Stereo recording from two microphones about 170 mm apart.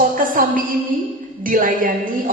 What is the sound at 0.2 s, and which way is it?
Music, 55° right (ahead or behind).